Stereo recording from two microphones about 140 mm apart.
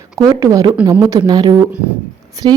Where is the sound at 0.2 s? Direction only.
25° right (ahead or behind).